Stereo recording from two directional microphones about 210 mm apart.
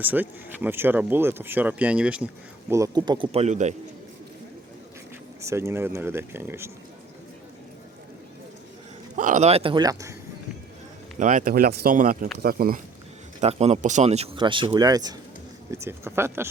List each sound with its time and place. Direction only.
0.0 s speech: 10° right (ahead or behind); by 3.8 s 35° right (ahead or behind)
5.4 s speech: 15° right (ahead or behind)
9.1 s speech: 40° right (ahead or behind); by 10.2 s 15° right (ahead or behind)
11.2 s speech: 40° right (ahead or behind)
13.4 s speech: 30° right (ahead or behind); by 16.5 s 10° right (ahead or behind)